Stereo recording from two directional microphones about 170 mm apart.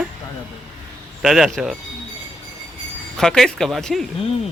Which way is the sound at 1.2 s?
Centre (ahead or behind).